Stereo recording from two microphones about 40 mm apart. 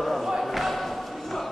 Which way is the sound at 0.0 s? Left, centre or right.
Centre.